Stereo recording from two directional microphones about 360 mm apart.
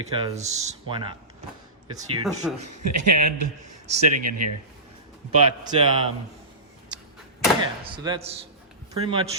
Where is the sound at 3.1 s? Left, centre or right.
Right.